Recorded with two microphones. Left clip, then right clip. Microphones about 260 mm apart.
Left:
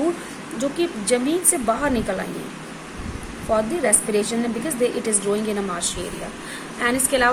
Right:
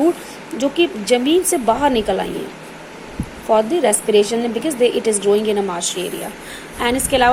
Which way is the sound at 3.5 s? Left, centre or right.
Centre.